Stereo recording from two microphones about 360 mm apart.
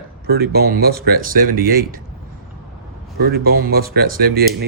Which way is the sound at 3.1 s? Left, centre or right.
Right.